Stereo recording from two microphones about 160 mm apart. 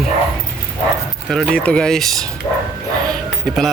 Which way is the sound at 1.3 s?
5° left (ahead or behind).